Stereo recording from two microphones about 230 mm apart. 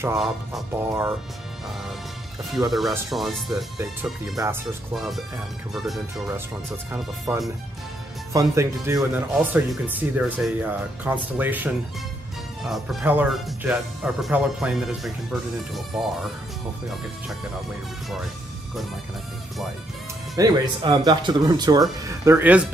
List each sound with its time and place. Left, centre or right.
0.2 s speech: centre
2.7 s speech: centre
20.3 s speech: centre